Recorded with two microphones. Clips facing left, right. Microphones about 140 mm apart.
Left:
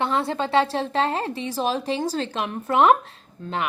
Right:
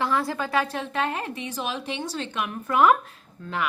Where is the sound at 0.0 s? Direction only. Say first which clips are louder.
Left 2 dB; 25° left (ahead or behind).